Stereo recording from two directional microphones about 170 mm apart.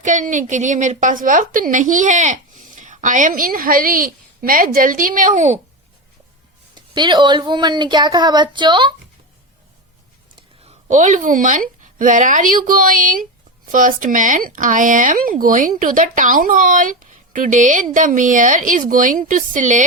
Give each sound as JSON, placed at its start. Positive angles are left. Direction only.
{"t": 0.0, "sound": "a woman's voice", "side_deg": -45}
{"t": 6.7, "sound": "a woman's voice", "side_deg": -25}
{"t": 10.6, "sound": "a woman's voice", "side_deg": -40}